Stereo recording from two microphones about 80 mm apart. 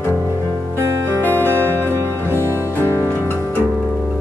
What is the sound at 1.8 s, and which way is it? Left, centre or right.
Music, right.